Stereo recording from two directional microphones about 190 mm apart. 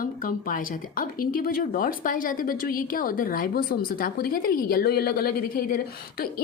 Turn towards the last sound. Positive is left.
turn(degrees=50)  # may be behind; listen again after turning